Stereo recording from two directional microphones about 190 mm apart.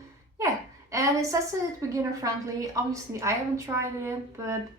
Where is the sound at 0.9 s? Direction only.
15° right (ahead or behind).